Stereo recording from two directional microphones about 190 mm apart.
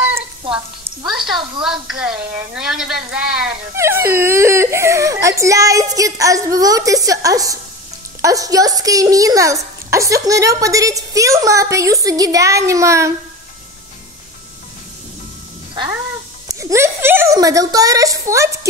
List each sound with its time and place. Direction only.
1.1 s a woman's voice: centre (ahead or behind)
16.4 s a woman's voice: 15° right (ahead or behind)